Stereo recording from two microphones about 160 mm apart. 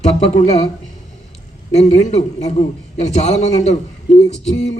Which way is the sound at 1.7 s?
45° left (ahead or behind).